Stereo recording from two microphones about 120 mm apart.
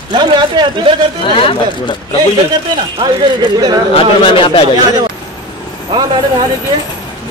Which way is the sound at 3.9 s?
45° left (ahead or behind).